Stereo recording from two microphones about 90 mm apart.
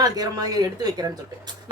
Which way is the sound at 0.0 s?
45° right (ahead or behind).